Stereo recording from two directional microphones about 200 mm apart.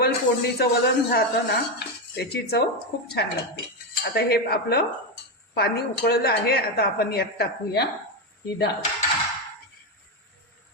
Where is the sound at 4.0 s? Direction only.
50° left (ahead or behind).